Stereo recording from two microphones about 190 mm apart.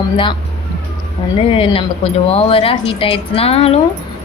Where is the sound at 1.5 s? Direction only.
30° left (ahead or behind).